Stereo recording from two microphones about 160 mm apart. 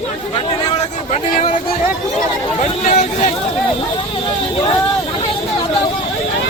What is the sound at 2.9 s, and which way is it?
Speech, 45° left (ahead or behind).